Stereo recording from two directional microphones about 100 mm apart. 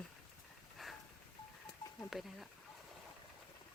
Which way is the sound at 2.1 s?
Centre (ahead or behind).